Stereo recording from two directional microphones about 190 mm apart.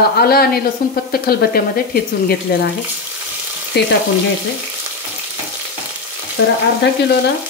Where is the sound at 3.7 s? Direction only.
60° left (ahead or behind).